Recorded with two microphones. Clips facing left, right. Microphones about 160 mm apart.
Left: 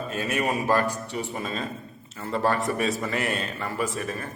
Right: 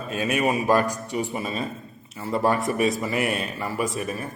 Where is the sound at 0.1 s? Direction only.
15° right (ahead or behind).